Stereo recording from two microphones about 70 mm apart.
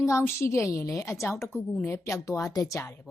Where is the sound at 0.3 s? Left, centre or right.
Left.